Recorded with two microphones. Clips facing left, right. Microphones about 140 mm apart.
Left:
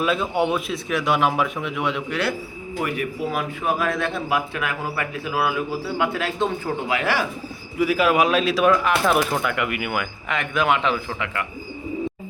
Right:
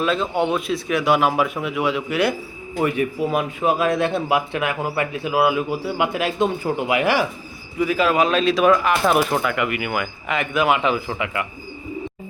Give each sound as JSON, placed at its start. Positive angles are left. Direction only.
{"t": 0.0, "sound": "speech", "side_deg": 10}
{"t": 2.8, "sound": "a man's voice", "side_deg": -25}
{"t": 7.8, "sound": "speech", "side_deg": 5}